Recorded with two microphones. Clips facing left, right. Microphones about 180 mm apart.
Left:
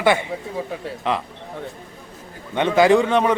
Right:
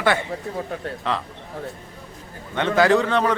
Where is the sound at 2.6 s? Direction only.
15° left (ahead or behind).